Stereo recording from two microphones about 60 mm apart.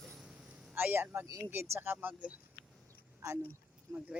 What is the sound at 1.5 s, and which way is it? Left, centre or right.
Speech, right.